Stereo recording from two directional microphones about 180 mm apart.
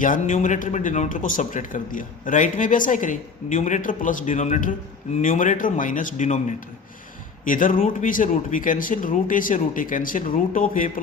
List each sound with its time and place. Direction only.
0.0 s speech: 45° left (ahead or behind)
7.4 s speech: 50° left (ahead or behind)